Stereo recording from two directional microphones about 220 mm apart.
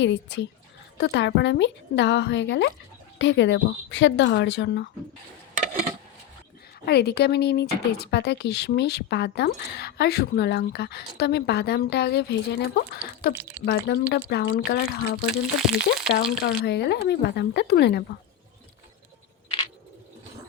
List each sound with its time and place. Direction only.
0.0 s speech: 55° left (ahead or behind)
6.8 s speech: 45° left (ahead or behind)
13.3 s speech: 10° right (ahead or behind)
13.7 s speech: 45° left (ahead or behind)
15.3 s speech: centre (ahead or behind)
16.4 s speech: 50° left (ahead or behind)